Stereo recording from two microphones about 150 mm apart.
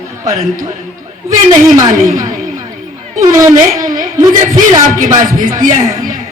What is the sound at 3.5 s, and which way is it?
Speech, 60° right (ahead or behind).